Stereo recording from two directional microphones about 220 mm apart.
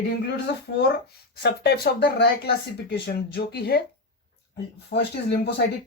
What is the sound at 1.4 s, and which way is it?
Speech, 50° left (ahead or behind).